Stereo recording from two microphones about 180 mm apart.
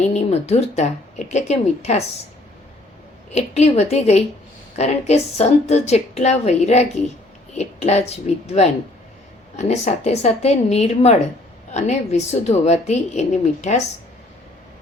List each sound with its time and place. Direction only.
0.0 s a woman's voice: 35° left (ahead or behind)
3.3 s a woman's voice: 35° left (ahead or behind)